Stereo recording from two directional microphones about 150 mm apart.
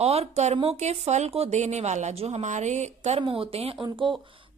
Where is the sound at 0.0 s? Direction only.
45° right (ahead or behind).